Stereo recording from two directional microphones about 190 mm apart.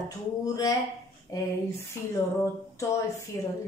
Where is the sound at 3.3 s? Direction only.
10° left (ahead or behind).